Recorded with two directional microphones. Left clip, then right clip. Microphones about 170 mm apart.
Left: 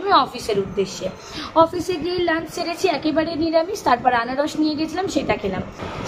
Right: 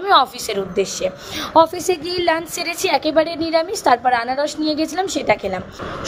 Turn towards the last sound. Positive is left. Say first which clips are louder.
# right 3 dB
turn(degrees=-35)  # may be behind; listen again after turning